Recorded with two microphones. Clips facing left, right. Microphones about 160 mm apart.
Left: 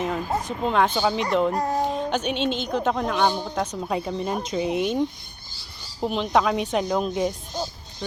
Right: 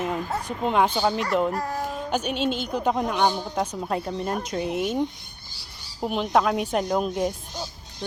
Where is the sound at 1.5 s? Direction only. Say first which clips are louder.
Left 4 dB; 20° left (ahead or behind).